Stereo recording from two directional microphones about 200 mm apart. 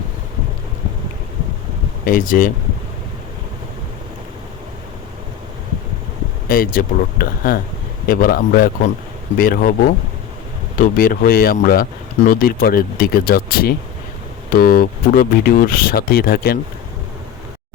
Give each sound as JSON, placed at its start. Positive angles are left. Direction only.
{"t": 2.0, "sound": "speech", "side_deg": 45}
{"t": 6.5, "sound": "speech", "side_deg": 45}